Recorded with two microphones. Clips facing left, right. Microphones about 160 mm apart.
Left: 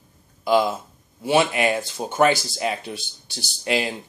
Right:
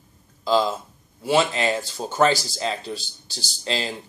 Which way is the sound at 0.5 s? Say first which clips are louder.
Left 1 dB; 15° left (ahead or behind).